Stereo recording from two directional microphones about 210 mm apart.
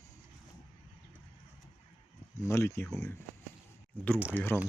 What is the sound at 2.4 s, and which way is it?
Speech, 15° left (ahead or behind).